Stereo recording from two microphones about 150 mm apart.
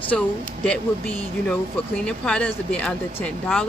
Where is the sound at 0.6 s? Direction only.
5° left (ahead or behind).